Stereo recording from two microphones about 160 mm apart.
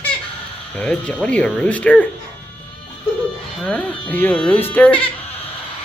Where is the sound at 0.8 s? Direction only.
5° left (ahead or behind).